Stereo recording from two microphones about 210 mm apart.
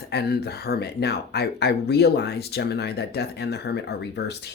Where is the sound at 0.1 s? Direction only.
50° left (ahead or behind).